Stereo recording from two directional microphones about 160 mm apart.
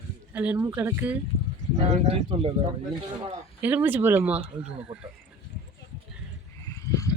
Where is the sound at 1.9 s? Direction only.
35° right (ahead or behind).